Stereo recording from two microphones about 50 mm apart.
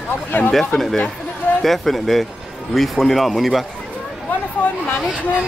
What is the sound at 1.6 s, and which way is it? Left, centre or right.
Speech, centre.